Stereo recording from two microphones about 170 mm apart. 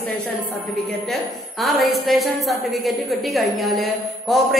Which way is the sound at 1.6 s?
Centre (ahead or behind).